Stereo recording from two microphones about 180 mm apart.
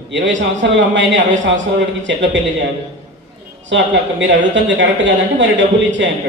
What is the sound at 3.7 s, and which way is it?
Speech, 90° right.